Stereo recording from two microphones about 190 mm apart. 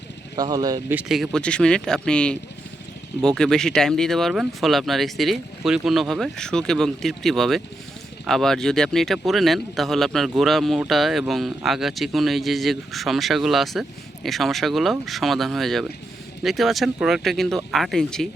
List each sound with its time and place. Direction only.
0.3 s speech: 20° right (ahead or behind)
0.9 s speech: centre (ahead or behind)